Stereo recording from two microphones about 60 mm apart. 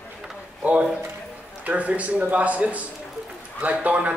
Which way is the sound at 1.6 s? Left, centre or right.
Right.